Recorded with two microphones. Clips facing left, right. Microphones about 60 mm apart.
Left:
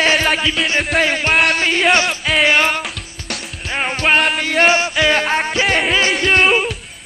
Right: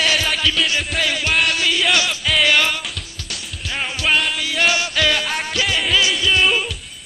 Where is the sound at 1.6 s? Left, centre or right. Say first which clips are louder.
Left 4 dB; left.